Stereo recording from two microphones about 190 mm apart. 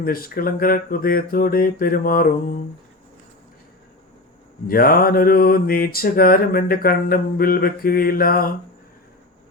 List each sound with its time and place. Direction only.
0.0 s mantra: 50° left (ahead or behind)
4.6 s mantra: 50° left (ahead or behind)